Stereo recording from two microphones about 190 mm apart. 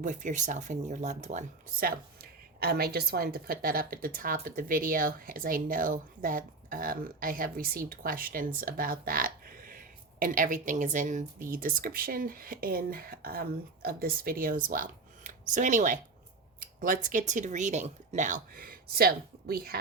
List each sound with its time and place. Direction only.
0.0 s speech: 40° right (ahead or behind)
2.6 s a woman's voice: 55° right (ahead or behind)